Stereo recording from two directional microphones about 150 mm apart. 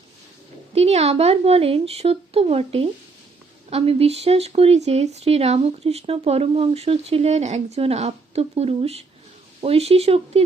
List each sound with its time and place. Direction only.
0.7 s speech: 45° right (ahead or behind)